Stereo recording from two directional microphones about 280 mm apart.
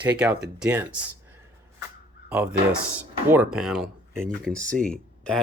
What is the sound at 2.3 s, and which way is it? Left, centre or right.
Speech, centre.